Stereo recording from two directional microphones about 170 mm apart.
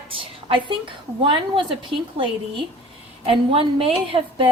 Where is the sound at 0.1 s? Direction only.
30° right (ahead or behind).